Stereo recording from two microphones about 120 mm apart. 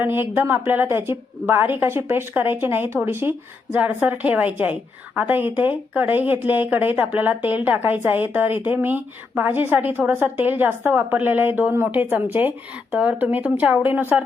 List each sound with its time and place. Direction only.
0.0 s a woman's voice: 20° right (ahead or behind)